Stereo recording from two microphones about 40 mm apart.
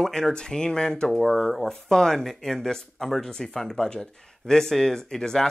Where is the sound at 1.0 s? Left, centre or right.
Centre.